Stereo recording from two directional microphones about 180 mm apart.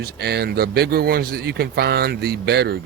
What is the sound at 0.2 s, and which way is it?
Speech, 65° right (ahead or behind).